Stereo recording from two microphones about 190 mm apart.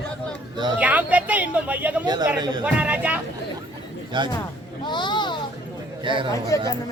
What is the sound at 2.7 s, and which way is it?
Speech, 5° right (ahead or behind).